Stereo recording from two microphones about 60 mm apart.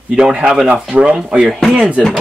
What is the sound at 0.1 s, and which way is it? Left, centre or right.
Speech, centre.